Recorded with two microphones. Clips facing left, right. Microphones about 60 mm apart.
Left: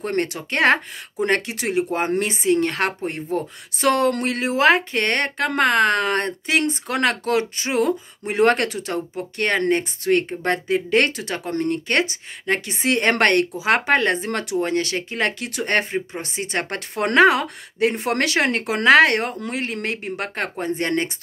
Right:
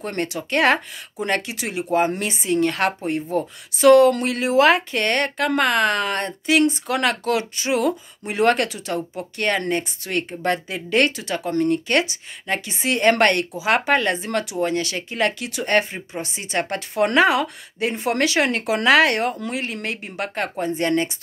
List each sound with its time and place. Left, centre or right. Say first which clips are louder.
0.0 s speech: left 2 dB; left